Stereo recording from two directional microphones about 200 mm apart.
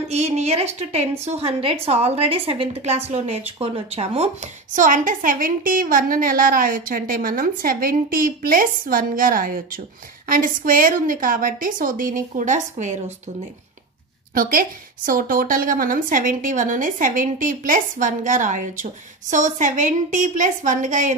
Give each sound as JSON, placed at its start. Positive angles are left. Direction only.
{"t": 0.1, "sound": "a woman's voice", "side_deg": -35}
{"t": 4.7, "sound": "a woman's voice", "side_deg": -40}
{"t": 14.3, "sound": "a woman's voice", "side_deg": -45}